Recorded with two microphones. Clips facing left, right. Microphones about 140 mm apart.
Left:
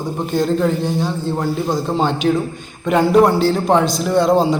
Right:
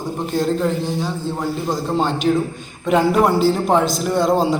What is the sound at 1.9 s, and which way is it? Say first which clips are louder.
A man's voice: even; centre (ahead or behind).